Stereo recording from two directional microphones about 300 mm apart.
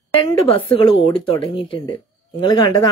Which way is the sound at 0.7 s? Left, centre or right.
Centre.